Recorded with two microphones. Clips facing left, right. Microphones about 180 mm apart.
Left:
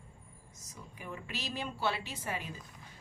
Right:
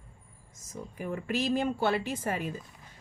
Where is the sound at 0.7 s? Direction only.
50° right (ahead or behind).